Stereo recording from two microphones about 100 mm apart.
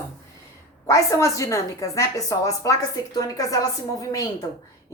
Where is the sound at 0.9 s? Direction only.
30° left (ahead or behind).